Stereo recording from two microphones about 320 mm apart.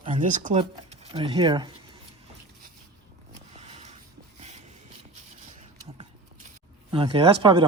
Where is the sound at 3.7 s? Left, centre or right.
Right.